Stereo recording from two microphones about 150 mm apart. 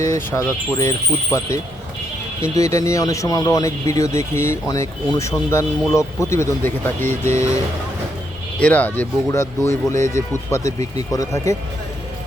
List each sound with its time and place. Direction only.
0.3 s speech: 20° left (ahead or behind)
8.5 s speech: 10° left (ahead or behind)